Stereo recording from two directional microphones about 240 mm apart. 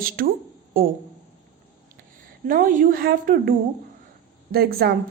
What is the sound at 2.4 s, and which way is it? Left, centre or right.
A woman's voice, right.